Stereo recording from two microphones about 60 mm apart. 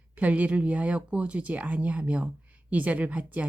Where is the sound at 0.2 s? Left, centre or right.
Right.